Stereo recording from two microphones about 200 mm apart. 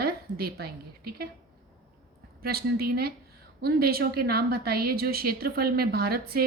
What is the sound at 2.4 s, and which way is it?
A woman's voice, 50° right (ahead or behind).